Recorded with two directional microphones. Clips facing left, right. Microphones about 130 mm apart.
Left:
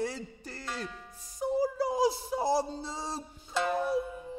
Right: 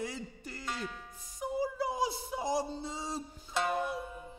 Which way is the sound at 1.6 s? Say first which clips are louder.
Left 5 dB; 35° left (ahead or behind).